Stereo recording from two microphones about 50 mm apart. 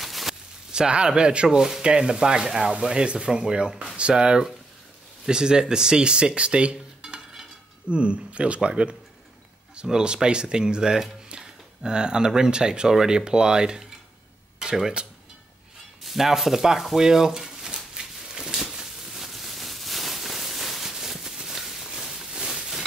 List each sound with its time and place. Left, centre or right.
0.0 s a sound: centre
0.7 s speech: centre
16.0 s stir: centre